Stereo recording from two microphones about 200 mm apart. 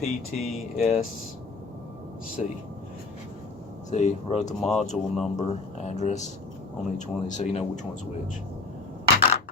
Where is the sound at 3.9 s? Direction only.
35° left (ahead or behind).